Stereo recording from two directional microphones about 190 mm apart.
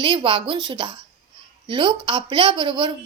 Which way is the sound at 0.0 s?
25° right (ahead or behind).